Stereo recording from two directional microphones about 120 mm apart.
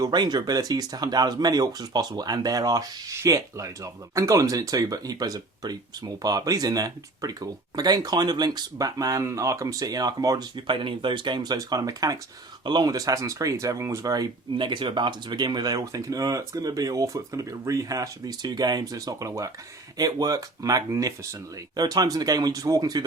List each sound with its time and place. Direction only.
0.0 s speech: 35° right (ahead or behind)